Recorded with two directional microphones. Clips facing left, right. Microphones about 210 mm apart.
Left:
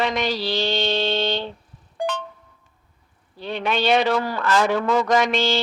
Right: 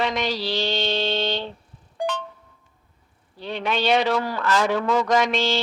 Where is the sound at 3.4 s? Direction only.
55° left (ahead or behind).